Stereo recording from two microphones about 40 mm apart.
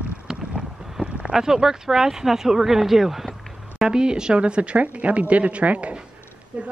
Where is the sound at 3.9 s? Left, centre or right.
Centre.